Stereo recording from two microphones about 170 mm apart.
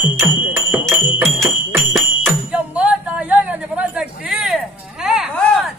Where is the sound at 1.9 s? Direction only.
Centre (ahead or behind).